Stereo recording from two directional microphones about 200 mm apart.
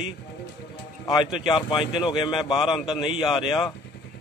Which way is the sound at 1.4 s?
25° left (ahead or behind).